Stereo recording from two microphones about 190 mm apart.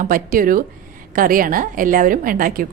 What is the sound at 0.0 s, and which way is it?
A woman's voice, 45° right (ahead or behind).